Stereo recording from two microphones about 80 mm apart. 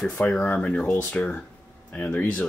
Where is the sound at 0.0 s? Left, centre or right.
Centre.